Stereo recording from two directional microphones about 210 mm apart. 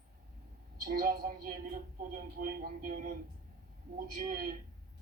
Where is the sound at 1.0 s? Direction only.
40° right (ahead or behind).